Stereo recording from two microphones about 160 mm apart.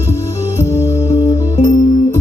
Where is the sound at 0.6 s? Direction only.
15° left (ahead or behind).